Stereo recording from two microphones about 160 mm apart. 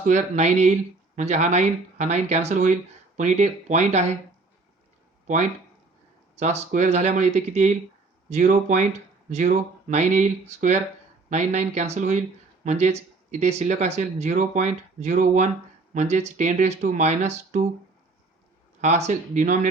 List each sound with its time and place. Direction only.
0.0 s speech: 50° right (ahead or behind)
6.3 s speech: 45° right (ahead or behind)
18.8 s speech: 45° right (ahead or behind)